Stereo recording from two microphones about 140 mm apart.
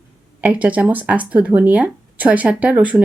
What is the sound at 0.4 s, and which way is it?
Speech, 10° right (ahead or behind).